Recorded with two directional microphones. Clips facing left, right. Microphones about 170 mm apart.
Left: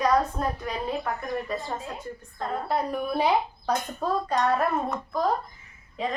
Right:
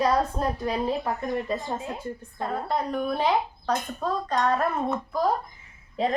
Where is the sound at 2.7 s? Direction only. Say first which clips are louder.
Even; 5° left (ahead or behind).